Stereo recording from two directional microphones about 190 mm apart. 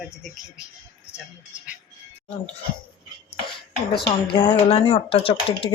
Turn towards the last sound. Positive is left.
turn(degrees=30)  # may be behind; listen again after turning